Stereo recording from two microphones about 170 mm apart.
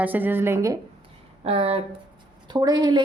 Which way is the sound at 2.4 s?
25° right (ahead or behind).